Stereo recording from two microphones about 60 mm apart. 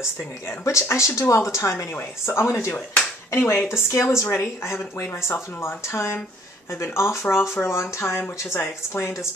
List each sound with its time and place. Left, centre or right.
0.7 s speech: left
3.3 s speech: left
3.7 s speech: left
4.3 s speech: left